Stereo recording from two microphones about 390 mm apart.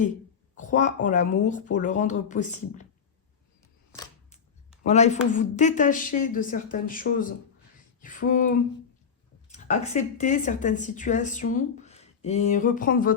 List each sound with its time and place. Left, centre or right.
0.5 s speech: centre
3.9 s scissors: centre
4.8 s a man's voice: centre